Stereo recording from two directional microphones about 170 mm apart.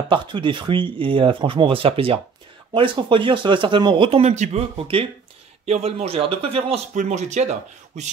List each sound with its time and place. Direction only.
0.1 s speech: 30° right (ahead or behind)